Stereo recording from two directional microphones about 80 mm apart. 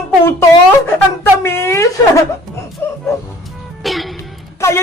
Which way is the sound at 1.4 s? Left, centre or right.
Left.